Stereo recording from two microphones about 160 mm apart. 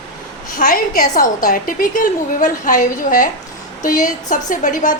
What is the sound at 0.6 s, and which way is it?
A woman's voice, 65° left (ahead or behind).